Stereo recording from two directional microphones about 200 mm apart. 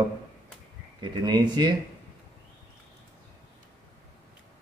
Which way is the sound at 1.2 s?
20° right (ahead or behind).